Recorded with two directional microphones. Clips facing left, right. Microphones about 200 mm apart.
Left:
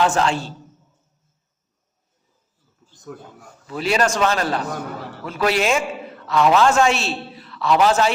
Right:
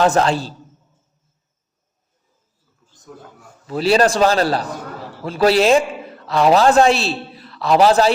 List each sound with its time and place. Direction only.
0.0 s a man's voice: 40° right (ahead or behind)
3.7 s a man's voice: 35° right (ahead or behind)